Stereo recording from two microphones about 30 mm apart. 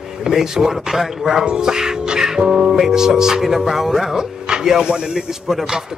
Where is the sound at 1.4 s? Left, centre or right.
Right; by 4.1 s centre.